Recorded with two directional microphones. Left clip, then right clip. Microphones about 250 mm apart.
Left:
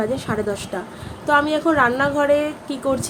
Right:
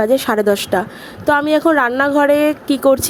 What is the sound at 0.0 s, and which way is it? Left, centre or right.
A woman's voice, right.